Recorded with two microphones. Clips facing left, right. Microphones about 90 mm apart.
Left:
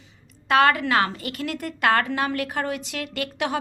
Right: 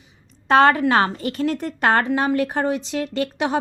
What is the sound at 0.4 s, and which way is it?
A woman's voice, 30° right (ahead or behind).